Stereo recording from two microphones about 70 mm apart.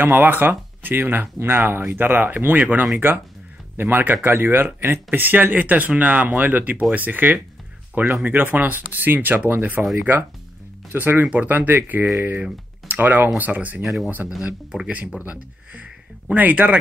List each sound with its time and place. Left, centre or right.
0.0 s speech: right
10.9 s speech: right